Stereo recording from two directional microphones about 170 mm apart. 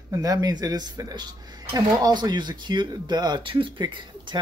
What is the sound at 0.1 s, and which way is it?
Speech, 20° right (ahead or behind).